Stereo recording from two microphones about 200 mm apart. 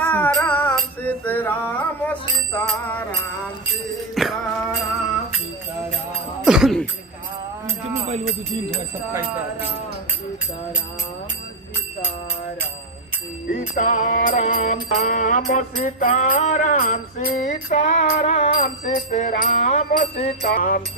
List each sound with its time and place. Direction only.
0.0 s music: 10° left (ahead or behind)
4.1 s music: centre (ahead or behind)
6.4 s a sound: 5° right (ahead or behind)
13.5 s music: 40° left (ahead or behind)
18.5 s music: 45° left (ahead or behind)